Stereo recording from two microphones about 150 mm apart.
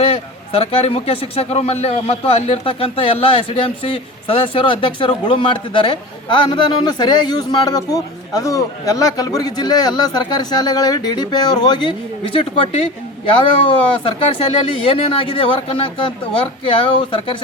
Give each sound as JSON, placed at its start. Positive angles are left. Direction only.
{"t": 0.0, "sound": "a man's voice", "side_deg": 40}